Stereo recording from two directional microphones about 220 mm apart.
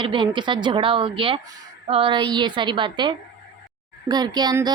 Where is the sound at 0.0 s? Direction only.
20° right (ahead or behind).